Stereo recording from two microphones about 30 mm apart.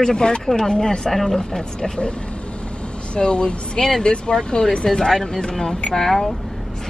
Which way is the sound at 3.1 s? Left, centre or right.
Left.